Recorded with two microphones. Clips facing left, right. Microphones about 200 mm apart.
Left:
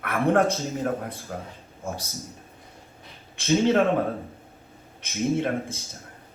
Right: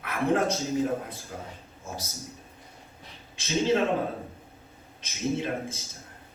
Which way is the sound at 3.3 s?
55° left (ahead or behind).